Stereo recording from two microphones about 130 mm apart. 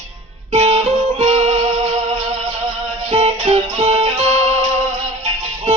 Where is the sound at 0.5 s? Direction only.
55° right (ahead or behind).